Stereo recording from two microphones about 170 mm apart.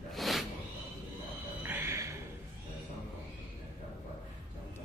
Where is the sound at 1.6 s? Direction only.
15° right (ahead or behind).